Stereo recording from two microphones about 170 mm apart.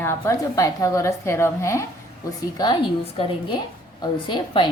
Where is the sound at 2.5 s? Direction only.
25° left (ahead or behind).